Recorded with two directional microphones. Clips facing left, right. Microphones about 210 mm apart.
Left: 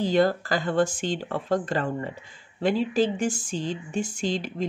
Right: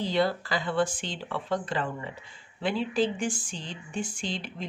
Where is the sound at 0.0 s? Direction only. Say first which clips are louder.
Left 5 dB; 45° left (ahead or behind).